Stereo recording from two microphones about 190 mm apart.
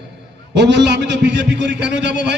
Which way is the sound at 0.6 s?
65° right (ahead or behind).